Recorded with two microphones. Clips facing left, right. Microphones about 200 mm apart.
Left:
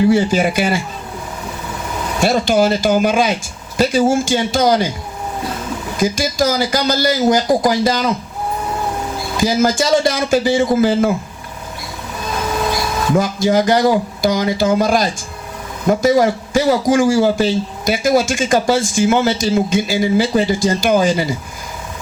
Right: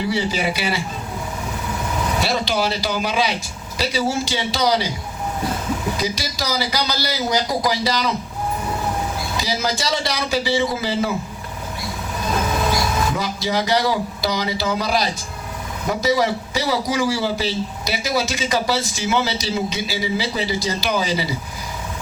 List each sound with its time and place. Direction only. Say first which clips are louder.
0.1 s a man's voice: left 8 dB; 50° left (ahead or behind)
2.2 s a man's voice: left 11 dB; 50° left (ahead or behind)
6.0 s a man's voice: left 9 dB; 50° left (ahead or behind)
9.4 s a man's voice: left 10 dB; 50° left (ahead or behind)
13.1 s a man's voice: left 8 dB; 50° left (ahead or behind)